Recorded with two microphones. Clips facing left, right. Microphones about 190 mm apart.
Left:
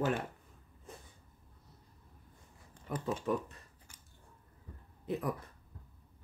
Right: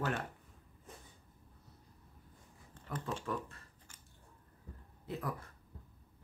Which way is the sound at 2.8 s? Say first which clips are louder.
Left 5 dB; 15° left (ahead or behind).